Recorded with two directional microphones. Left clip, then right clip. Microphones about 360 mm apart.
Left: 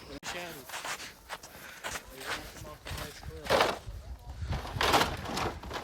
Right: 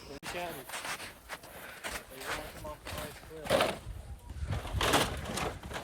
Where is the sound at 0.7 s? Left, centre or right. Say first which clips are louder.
Left 1 dB; centre.